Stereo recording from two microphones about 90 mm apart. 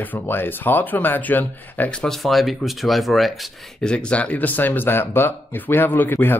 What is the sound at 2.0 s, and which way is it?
Speech, 5° left (ahead or behind).